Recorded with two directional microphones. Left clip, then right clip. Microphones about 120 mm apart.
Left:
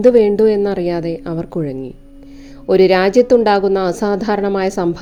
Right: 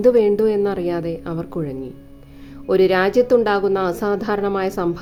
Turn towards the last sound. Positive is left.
turn(degrees=30)  # may be behind; listen again after turning